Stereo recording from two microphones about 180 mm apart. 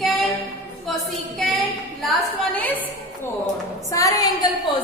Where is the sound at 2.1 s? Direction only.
10° left (ahead or behind).